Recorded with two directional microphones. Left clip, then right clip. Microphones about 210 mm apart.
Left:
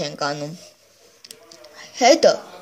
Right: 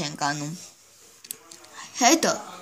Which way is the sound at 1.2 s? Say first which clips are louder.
Left 2 dB; 10° right (ahead or behind).